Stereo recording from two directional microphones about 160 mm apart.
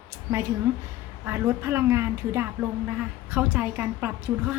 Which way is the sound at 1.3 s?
15° right (ahead or behind).